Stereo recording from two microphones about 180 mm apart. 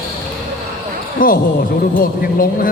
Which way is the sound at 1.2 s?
50° left (ahead or behind).